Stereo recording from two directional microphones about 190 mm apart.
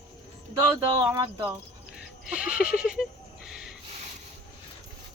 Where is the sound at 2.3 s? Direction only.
5° right (ahead or behind).